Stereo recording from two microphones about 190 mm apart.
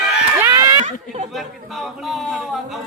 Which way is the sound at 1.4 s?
Centre (ahead or behind).